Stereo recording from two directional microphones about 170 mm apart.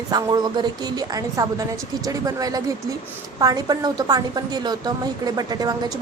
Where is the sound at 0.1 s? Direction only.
25° right (ahead or behind).